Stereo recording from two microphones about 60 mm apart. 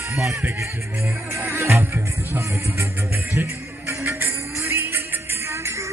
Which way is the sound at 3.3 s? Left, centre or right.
Right.